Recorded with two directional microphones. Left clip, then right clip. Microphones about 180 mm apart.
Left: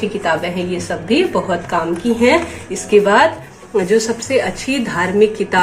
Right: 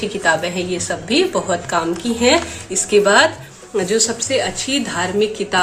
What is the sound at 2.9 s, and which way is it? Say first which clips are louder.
Speech: left 2 dB; 30° right (ahead or behind).